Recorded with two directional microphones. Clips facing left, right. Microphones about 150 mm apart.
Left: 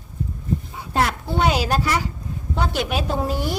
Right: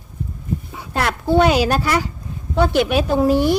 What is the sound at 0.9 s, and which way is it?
A woman's voice, 70° right (ahead or behind).